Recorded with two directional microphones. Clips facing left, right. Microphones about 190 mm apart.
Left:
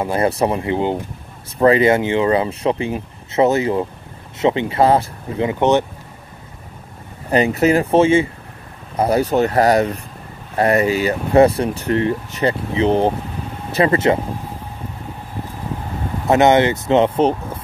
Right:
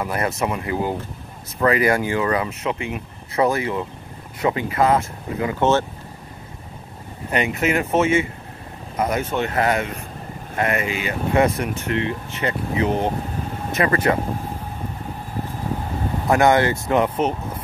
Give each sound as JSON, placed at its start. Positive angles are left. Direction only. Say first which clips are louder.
{"t": 0.0, "sound": "speech", "louder": "left 6 dB", "side_deg": 30}
{"t": 5.5, "sound": "speech", "louder": "left 3 dB", "side_deg": 15}
{"t": 7.2, "sound": "speech", "louder": "left 6 dB", "side_deg": 35}
{"t": 16.3, "sound": "speech", "louder": "left 4 dB", "side_deg": 20}